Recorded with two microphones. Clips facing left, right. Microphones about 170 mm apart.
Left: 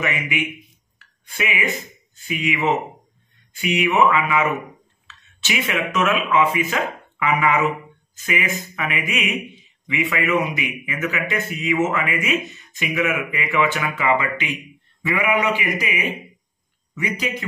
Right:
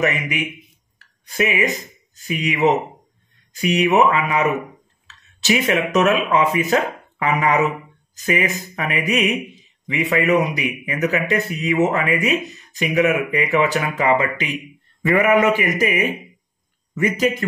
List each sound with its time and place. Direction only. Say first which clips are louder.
0.0 s a man's voice: right 3 dB; 40° right (ahead or behind)